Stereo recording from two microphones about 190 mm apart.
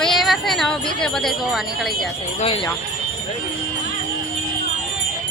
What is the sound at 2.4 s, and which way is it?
Speech, 25° left (ahead or behind).